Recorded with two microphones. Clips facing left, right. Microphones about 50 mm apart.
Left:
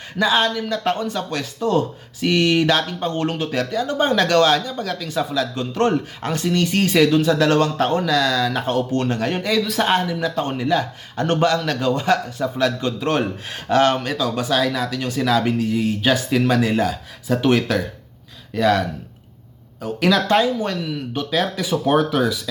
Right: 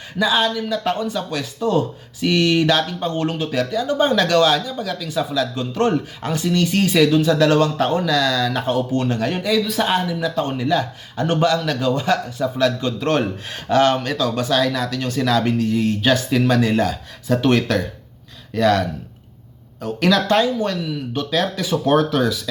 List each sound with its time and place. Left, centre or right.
0.2 s speech: left
2.2 s speech: left
9.0 s speech: left
10.3 s speech: left
13.0 s speech: centre
13.5 s speech: left
19.8 s speech: left